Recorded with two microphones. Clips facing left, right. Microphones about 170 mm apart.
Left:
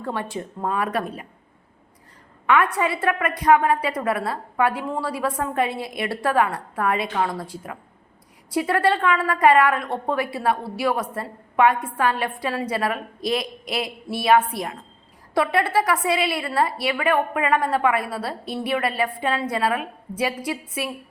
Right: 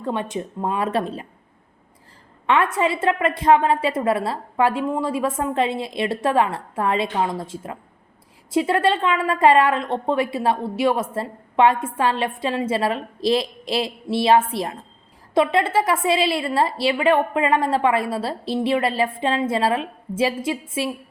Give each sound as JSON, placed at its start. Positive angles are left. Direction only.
{"t": 0.0, "sound": "a woman's voice", "side_deg": -20}
{"t": 2.5, "sound": "a woman's voice", "side_deg": -25}